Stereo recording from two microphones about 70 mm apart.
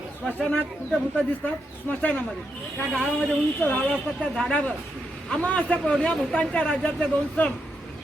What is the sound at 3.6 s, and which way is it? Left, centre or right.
Speech, centre.